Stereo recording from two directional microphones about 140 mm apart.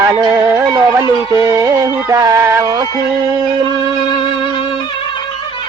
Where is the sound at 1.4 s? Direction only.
25° right (ahead or behind).